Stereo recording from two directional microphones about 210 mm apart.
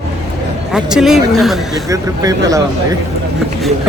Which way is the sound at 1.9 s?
15° right (ahead or behind).